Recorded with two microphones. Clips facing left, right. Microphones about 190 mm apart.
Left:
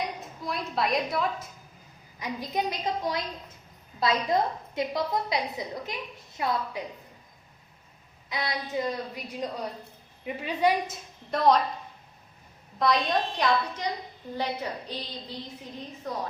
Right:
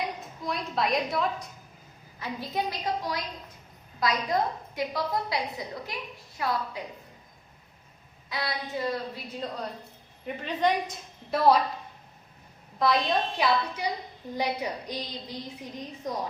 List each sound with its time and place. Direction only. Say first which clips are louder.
0.2 s a woman's voice: even; centre (ahead or behind)
2.1 s a woman's voice: left 1 dB; 15° left (ahead or behind)
8.3 s a woman's voice: left 1 dB; 20° left (ahead or behind)
11.3 s a woman's voice: right 1 dB; 5° right (ahead or behind)
12.8 s a woman's voice: even; centre (ahead or behind)